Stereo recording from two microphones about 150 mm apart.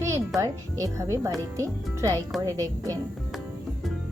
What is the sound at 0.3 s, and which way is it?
Speech, 20° right (ahead or behind).